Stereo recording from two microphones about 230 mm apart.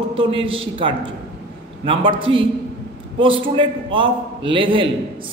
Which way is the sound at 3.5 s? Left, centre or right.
Right.